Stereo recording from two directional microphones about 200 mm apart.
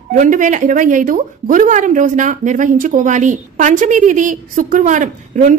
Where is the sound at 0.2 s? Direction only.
40° right (ahead or behind).